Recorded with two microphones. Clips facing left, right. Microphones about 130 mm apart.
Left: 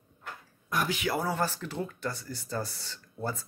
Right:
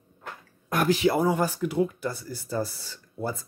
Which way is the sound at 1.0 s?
20° right (ahead or behind).